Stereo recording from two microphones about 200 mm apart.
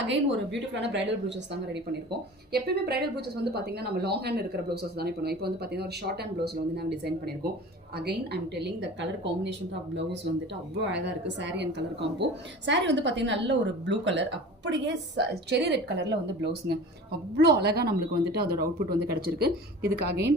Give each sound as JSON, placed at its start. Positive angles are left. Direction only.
{"t": 0.1, "sound": "a woman's voice", "side_deg": -60}
{"t": 2.5, "sound": "a woman's voice", "side_deg": -55}